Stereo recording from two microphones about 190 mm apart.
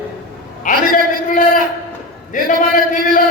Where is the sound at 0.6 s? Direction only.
45° left (ahead or behind).